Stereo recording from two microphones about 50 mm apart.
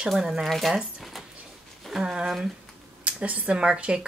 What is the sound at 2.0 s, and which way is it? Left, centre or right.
Speech, centre.